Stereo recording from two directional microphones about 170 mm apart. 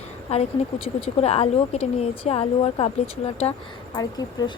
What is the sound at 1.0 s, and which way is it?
A woman's voice, 35° left (ahead or behind).